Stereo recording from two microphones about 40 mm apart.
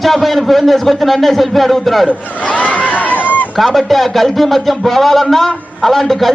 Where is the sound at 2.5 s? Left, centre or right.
Left.